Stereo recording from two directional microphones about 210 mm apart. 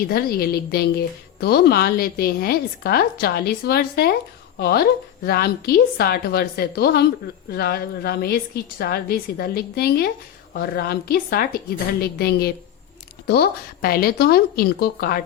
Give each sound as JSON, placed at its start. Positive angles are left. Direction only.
{"t": 0.0, "sound": "a woman's voice", "side_deg": 45}